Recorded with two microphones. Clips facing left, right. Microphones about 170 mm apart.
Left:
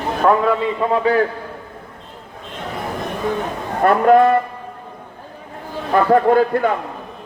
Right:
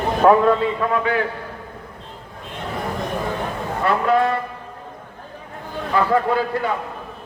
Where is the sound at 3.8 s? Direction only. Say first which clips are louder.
Left 6 dB; 50° left (ahead or behind).